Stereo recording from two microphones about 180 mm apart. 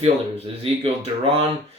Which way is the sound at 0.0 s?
35° right (ahead or behind).